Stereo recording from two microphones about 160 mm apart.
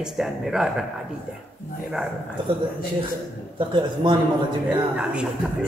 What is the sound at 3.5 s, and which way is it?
Speech, 30° right (ahead or behind).